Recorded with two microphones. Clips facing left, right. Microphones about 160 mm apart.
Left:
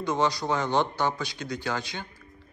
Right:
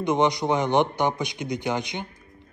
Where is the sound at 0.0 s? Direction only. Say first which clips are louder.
Right 4 dB; 20° right (ahead or behind).